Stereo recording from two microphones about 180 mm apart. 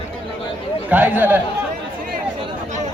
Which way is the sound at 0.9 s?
10° right (ahead or behind).